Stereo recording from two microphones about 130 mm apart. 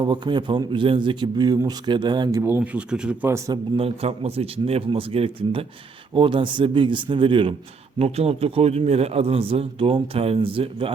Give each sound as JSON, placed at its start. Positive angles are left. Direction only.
{"t": 0.0, "sound": "speech", "side_deg": -35}
{"t": 2.4, "sound": "speech", "side_deg": -15}
{"t": 3.2, "sound": "speech", "side_deg": -25}
{"t": 3.8, "sound": "a man's voice", "side_deg": -50}